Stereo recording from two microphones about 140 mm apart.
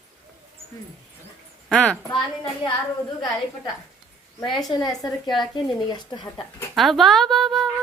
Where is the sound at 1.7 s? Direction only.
5° left (ahead or behind).